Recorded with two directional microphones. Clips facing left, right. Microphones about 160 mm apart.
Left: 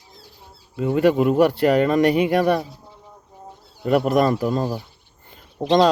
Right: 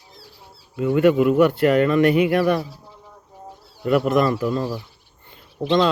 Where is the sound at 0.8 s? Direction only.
35° left (ahead or behind).